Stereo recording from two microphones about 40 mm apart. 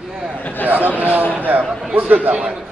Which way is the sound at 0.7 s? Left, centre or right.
Right.